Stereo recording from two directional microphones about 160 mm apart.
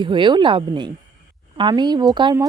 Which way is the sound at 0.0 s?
30° right (ahead or behind).